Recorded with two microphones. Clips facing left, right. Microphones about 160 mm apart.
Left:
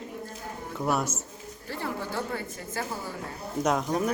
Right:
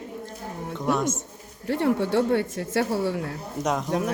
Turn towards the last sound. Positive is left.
turn(degrees=0)  # may be behind; listen again after turning